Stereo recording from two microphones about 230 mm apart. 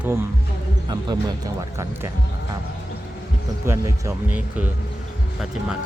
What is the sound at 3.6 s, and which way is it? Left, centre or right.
Speech, centre.